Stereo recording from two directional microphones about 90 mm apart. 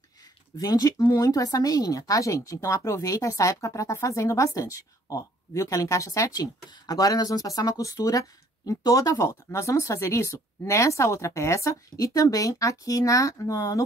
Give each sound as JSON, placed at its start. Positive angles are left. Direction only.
{"t": 0.6, "sound": "speech", "side_deg": 45}